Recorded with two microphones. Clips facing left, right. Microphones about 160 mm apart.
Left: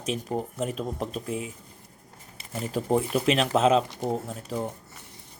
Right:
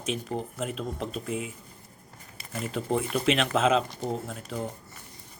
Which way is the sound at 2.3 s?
25° left (ahead or behind).